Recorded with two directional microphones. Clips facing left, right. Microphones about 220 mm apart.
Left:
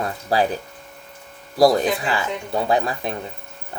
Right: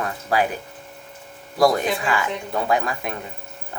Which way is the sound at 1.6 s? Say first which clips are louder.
Left 3 dB; 35° left (ahead or behind).